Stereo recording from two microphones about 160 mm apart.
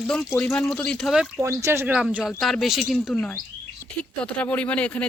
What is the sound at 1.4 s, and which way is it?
Speech, 15° right (ahead or behind).